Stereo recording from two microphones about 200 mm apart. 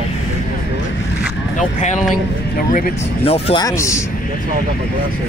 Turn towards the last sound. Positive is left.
turn(degrees=15)  # may be behind; listen again after turning